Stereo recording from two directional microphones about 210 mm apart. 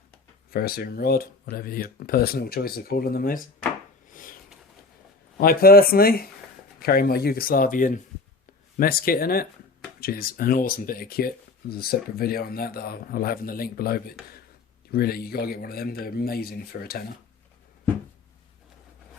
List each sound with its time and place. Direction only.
0.5 s speech: 45° left (ahead or behind)
4.1 s a sound: 40° left (ahead or behind)
5.4 s speech: 45° left (ahead or behind)